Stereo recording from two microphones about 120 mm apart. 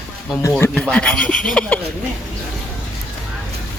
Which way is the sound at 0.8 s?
5° left (ahead or behind).